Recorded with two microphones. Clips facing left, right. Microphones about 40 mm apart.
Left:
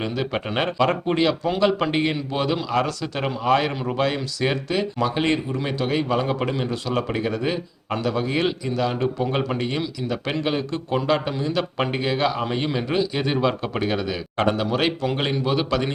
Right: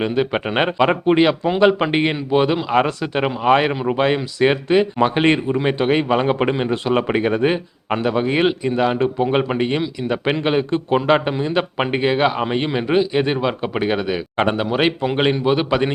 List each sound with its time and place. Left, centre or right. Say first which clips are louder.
0.0 s speech: right 6 dB; right